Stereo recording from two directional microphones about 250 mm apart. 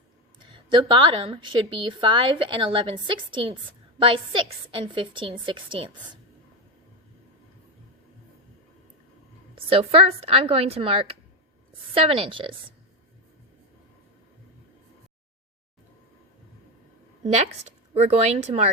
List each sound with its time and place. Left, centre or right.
0.4 s a woman's voice: centre
9.6 s a woman's voice: right
17.9 s a woman's voice: right